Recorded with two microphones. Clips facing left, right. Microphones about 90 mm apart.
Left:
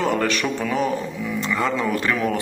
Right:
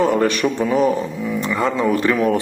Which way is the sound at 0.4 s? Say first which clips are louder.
Right 6 dB; 15° right (ahead or behind).